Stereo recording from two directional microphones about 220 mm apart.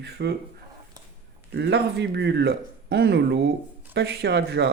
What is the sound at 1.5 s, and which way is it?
Speech, 50° right (ahead or behind).